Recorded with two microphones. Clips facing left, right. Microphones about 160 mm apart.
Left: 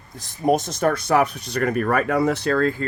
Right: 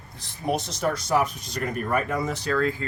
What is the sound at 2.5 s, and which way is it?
Speech, 50° left (ahead or behind).